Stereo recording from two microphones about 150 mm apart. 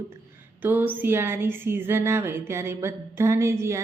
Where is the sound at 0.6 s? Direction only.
10° right (ahead or behind).